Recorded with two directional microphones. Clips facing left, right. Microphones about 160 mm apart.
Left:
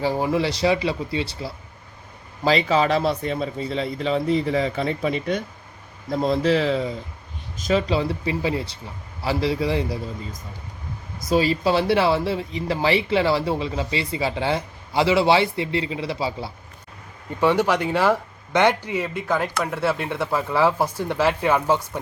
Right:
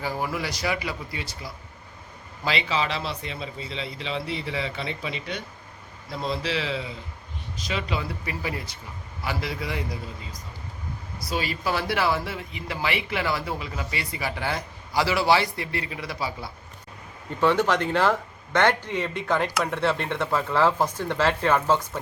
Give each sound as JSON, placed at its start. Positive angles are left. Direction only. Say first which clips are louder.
{"t": 0.0, "sound": "a man's voice", "louder": "left 7 dB", "side_deg": 30}
{"t": 11.2, "sound": "speech", "louder": "left 9 dB", "side_deg": 40}
{"t": 17.4, "sound": "speech", "louder": "left 2 dB", "side_deg": 15}